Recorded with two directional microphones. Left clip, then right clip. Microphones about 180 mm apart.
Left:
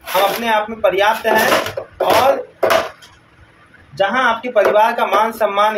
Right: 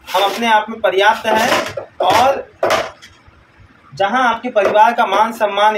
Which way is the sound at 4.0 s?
15° right (ahead or behind).